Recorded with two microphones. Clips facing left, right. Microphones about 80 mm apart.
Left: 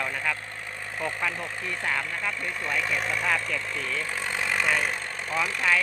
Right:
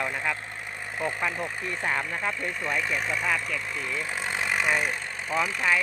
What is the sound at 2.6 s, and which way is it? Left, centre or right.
Speech, centre.